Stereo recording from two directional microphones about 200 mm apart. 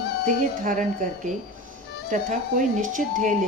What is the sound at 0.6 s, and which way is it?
Speech, 40° right (ahead or behind).